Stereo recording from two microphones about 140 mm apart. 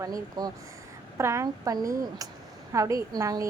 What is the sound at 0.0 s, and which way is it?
A woman's voice, 25° right (ahead or behind).